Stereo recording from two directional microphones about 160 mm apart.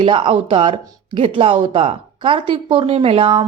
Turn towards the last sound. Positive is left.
turn(degrees=-35)  # may be behind; listen again after turning